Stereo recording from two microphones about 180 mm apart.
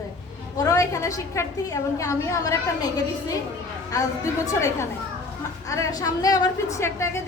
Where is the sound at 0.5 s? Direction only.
20° left (ahead or behind).